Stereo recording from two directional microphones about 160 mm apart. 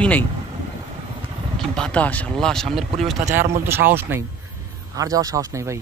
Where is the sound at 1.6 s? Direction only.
5° left (ahead or behind).